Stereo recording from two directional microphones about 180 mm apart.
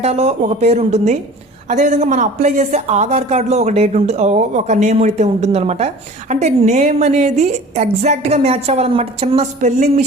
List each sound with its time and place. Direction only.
0.0 s speech: 35° right (ahead or behind)